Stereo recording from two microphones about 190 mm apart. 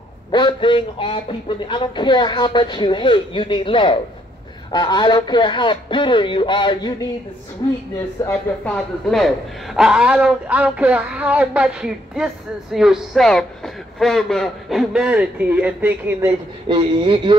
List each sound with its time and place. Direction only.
0.3 s a man's voice: 25° left (ahead or behind)
8.3 s a woman's voice: 5° left (ahead or behind)
16.6 s speech: 25° right (ahead or behind)